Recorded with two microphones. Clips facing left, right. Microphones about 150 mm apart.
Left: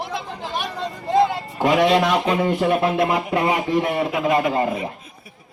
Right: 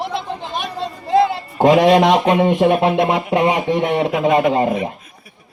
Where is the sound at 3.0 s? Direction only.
25° right (ahead or behind).